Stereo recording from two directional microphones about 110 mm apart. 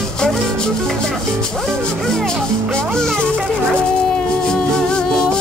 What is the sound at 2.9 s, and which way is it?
Music, 5° left (ahead or behind).